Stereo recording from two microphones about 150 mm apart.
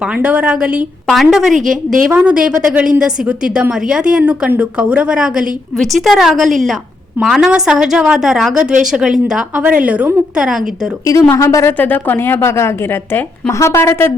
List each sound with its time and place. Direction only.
0.1 s a woman's voice: 10° right (ahead or behind)
11.0 s a woman's voice: 20° left (ahead or behind)